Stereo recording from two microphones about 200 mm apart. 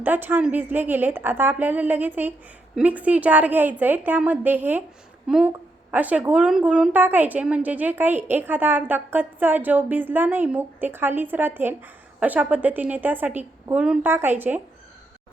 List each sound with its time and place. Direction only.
0.0 s speech: 10° right (ahead or behind)